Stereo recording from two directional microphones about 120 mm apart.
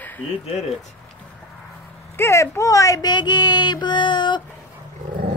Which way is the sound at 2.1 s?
20° left (ahead or behind).